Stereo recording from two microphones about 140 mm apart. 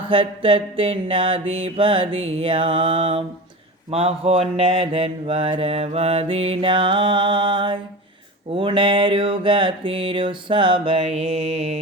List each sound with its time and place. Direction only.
0.1 s mantra: 40° right (ahead or behind)